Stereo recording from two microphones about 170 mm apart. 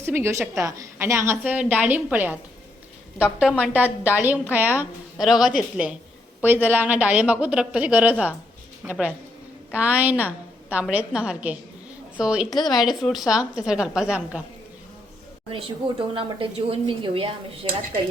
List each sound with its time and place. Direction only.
0.0 s a woman's voice: 15° right (ahead or behind)
3.4 s a woman's voice: 10° right (ahead or behind)
12.5 s speech: 25° left (ahead or behind)
12.8 s a woman's voice: centre (ahead or behind)
15.5 s a woman's voice: 30° right (ahead or behind)